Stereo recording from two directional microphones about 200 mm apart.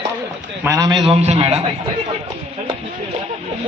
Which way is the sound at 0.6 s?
20° right (ahead or behind).